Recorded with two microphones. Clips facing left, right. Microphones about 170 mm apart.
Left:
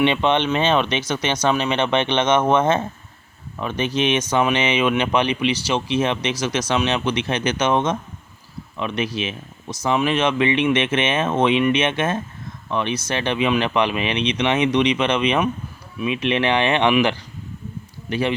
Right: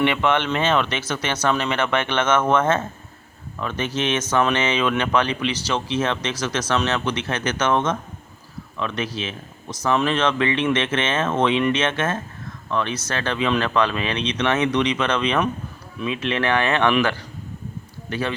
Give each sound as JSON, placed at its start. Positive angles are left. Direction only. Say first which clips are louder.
{"t": 0.0, "sound": "speech", "louder": "left 2 dB", "side_deg": 20}